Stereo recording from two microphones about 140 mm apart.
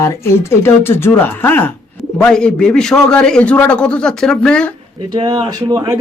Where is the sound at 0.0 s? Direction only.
20° left (ahead or behind).